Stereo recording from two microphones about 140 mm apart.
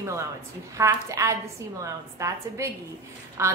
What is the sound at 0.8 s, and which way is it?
A woman's voice, 20° right (ahead or behind).